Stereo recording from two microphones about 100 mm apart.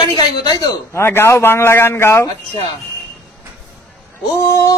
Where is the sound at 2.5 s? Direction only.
40° left (ahead or behind).